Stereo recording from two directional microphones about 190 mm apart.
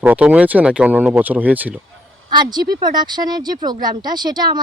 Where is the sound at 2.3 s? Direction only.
20° right (ahead or behind).